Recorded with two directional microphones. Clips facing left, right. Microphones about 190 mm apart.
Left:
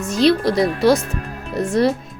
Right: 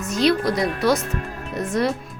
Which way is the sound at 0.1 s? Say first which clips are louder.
Left 4 dB; 30° left (ahead or behind).